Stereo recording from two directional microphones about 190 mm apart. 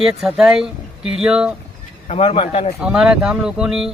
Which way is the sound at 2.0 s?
35° left (ahead or behind).